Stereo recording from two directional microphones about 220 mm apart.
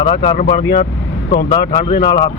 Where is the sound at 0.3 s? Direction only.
45° left (ahead or behind).